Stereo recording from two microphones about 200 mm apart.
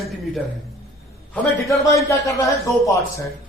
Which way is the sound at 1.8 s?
15° left (ahead or behind).